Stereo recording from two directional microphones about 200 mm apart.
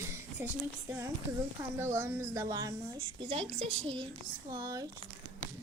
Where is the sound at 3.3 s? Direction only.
30° right (ahead or behind).